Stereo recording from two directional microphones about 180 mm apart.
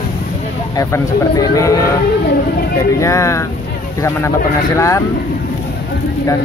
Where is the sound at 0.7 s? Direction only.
20° left (ahead or behind).